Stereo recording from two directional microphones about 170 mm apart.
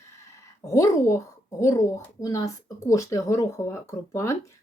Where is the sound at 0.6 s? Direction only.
20° left (ahead or behind).